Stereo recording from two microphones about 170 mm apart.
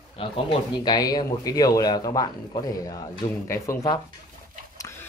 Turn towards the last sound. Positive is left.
turn(degrees=15)  # may be behind; listen again after turning